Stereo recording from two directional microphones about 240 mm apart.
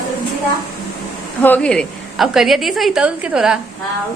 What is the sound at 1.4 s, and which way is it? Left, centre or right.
A woman's voice, centre.